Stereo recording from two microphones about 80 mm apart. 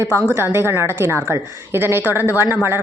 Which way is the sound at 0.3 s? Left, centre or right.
Right.